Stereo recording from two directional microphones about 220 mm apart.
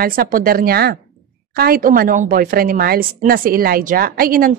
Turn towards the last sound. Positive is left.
turn(degrees=-40)  # may be behind; listen again after turning